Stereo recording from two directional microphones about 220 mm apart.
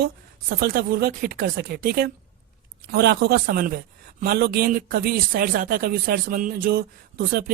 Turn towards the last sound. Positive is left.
turn(degrees=-40)  # may be behind; listen again after turning